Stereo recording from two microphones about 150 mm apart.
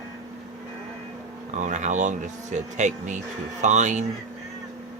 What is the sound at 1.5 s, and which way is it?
Speech, 55° right (ahead or behind).